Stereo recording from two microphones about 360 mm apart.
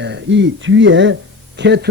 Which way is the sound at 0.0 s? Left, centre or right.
Right.